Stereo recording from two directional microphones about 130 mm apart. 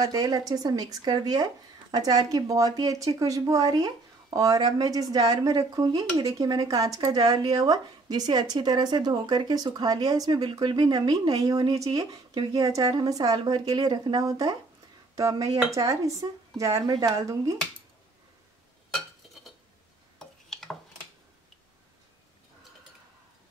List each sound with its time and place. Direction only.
0.0 s speech: 30° right (ahead or behind)
20.2 s tick-tock: 5° left (ahead or behind)